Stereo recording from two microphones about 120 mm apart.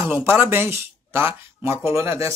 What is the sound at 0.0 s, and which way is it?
Speech, 20° right (ahead or behind).